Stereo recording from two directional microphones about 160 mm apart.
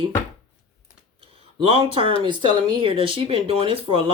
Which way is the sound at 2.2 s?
30° right (ahead or behind).